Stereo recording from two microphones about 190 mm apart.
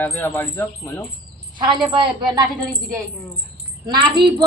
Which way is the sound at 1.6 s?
25° right (ahead or behind).